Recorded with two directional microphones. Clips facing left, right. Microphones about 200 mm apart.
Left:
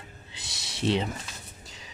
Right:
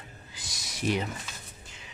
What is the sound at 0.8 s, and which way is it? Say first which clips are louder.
Speech: left 3 dB; 25° left (ahead or behind).